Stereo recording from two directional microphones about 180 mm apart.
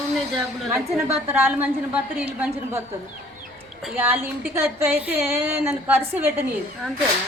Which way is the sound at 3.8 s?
10° right (ahead or behind).